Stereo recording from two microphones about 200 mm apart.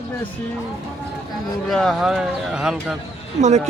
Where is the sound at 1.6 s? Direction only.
Centre (ahead or behind).